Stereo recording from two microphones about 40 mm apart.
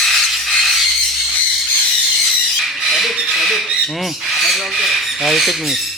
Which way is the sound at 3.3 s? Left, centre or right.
Centre.